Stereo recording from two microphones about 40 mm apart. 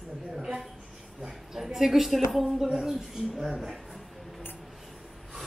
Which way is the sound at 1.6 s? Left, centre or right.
Centre.